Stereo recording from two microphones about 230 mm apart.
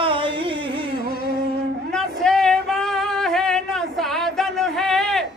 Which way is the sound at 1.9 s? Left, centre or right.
Centre.